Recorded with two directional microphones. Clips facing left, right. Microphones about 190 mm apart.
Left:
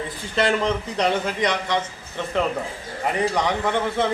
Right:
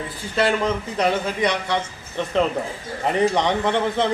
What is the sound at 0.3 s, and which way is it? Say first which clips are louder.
A man's voice: right 1 dB; 5° right (ahead or behind).